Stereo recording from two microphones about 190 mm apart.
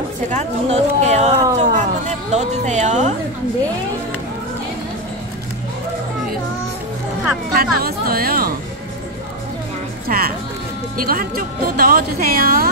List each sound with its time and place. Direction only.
0.3 s speech: 35° right (ahead or behind)
7.5 s speech: 50° right (ahead or behind)
10.0 s speech: 50° right (ahead or behind)